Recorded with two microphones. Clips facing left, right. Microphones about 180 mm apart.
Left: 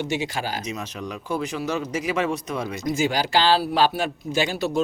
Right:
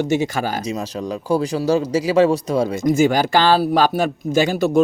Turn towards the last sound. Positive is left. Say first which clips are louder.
# right 7 dB
turn(degrees=-45)  # may be behind; listen again after turning